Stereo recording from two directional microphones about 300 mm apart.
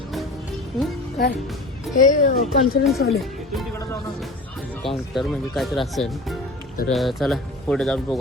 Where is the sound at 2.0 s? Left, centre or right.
Left.